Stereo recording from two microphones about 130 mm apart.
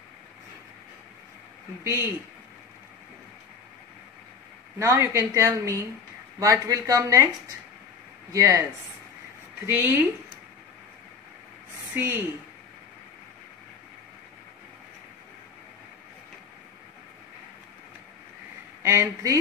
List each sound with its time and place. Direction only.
1.9 s speech: 20° right (ahead or behind)
4.7 s a woman's voice: 20° right (ahead or behind)
8.3 s a woman's voice: 25° right (ahead or behind)
9.7 s speech: 15° right (ahead or behind)
11.9 s speech: 15° right (ahead or behind)
18.8 s speech: 20° right (ahead or behind)